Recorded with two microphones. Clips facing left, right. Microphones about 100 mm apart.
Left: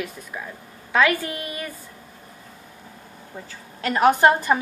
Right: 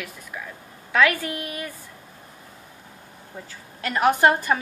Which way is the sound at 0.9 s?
25° left (ahead or behind).